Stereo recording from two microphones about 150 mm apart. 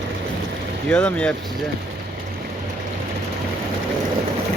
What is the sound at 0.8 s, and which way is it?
Speech, 5° left (ahead or behind).